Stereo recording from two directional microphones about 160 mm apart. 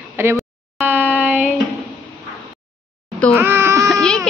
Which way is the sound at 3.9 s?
5° left (ahead or behind).